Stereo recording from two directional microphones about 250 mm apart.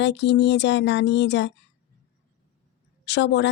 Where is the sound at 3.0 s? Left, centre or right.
Left.